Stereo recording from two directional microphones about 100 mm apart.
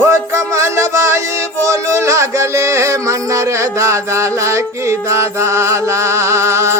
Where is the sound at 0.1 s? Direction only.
30° right (ahead or behind).